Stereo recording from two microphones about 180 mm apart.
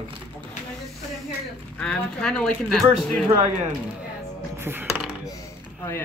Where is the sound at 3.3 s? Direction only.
40° right (ahead or behind).